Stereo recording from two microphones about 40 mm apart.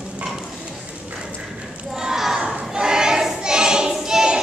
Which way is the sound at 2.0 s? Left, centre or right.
Centre.